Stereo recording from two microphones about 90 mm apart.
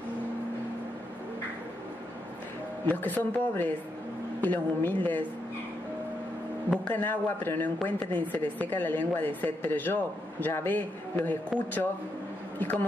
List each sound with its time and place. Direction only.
2.9 s speech: 20° left (ahead or behind)
6.8 s speech: 20° left (ahead or behind)